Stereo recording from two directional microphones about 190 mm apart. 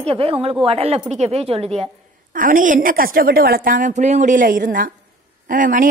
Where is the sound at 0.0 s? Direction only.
30° right (ahead or behind).